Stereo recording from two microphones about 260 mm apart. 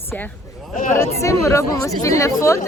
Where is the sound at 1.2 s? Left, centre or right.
Centre.